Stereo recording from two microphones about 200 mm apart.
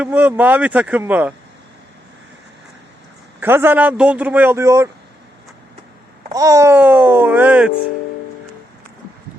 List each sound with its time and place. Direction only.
0.0 s a man's voice: 5° right (ahead or behind)
3.4 s a man's voice: 10° right (ahead or behind)
6.3 s a man's voice: 15° right (ahead or behind)